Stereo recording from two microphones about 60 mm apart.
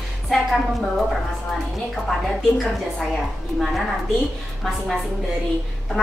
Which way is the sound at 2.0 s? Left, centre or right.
Centre.